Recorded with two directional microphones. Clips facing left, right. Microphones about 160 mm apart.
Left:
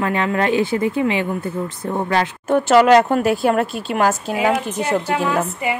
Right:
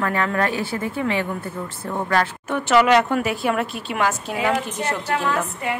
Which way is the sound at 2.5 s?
35° left (ahead or behind).